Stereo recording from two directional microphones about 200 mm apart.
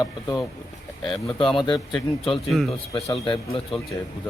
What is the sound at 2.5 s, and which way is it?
Speech, centre (ahead or behind).